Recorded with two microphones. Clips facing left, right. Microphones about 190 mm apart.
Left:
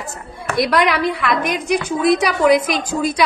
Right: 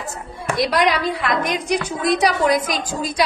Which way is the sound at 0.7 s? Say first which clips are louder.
Left 2 dB; 60° left (ahead or behind).